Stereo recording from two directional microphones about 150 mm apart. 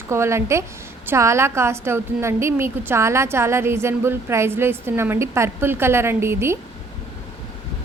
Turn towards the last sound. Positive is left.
turn(degrees=-15)  # may be behind; listen again after turning